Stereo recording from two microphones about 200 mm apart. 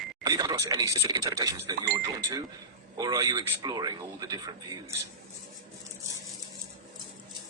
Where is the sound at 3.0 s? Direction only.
20° right (ahead or behind).